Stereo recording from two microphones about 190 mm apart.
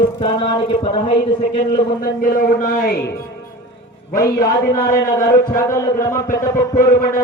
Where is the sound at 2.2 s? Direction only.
50° left (ahead or behind).